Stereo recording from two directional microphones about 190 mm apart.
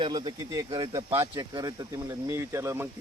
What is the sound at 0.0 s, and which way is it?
A man's voice, 25° right (ahead or behind).